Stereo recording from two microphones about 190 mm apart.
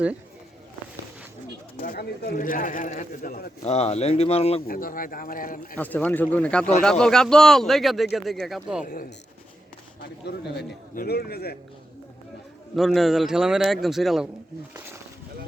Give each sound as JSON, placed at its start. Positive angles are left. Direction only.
{"t": 1.8, "sound": "speech", "side_deg": 50}
{"t": 3.6, "sound": "speech", "side_deg": 35}
{"t": 4.6, "sound": "speech", "side_deg": 50}
{"t": 5.7, "sound": "a man's voice", "side_deg": 10}
{"t": 8.8, "sound": "speech", "side_deg": 45}
{"t": 10.2, "sound": "a man's voice", "side_deg": 60}
{"t": 12.7, "sound": "a man's voice", "side_deg": 0}